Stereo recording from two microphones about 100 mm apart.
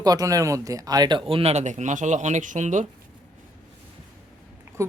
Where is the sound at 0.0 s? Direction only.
40° right (ahead or behind); by 1.6 s 80° right.